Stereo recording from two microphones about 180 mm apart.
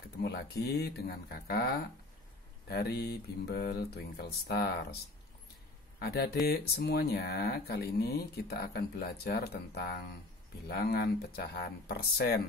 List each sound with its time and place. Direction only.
0.2 s speech: 65° left (ahead or behind)
5.9 s speech: 60° left (ahead or behind)